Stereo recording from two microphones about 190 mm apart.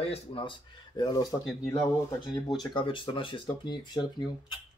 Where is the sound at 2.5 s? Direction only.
25° left (ahead or behind).